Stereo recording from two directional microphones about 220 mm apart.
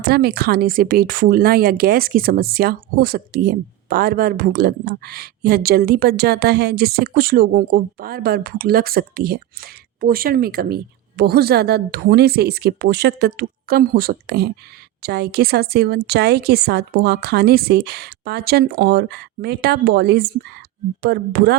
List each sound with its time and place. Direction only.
0.0 s speech: 45° right (ahead or behind)